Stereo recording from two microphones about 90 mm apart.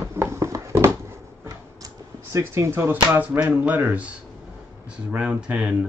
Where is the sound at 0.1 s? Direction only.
30° right (ahead or behind).